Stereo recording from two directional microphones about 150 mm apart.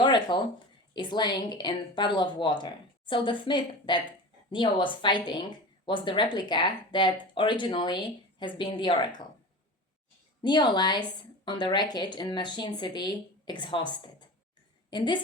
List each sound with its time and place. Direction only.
0.0 s a sound: 30° left (ahead or behind)
0.9 s a woman's voice: 30° left (ahead or behind)
10.4 s a woman's voice: 30° left (ahead or behind)